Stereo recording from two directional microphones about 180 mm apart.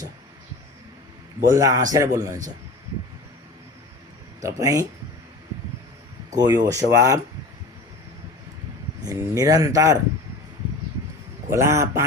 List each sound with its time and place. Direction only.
1.4 s speech: 20° right (ahead or behind)
4.4 s speech: 20° right (ahead or behind)
6.3 s speech: 20° right (ahead or behind)
9.0 s speech: 20° right (ahead or behind)
11.5 s speech: 15° right (ahead or behind)